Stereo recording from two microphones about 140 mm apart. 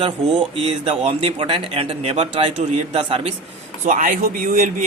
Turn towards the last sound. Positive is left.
turn(degrees=-70)  # may be behind; listen again after turning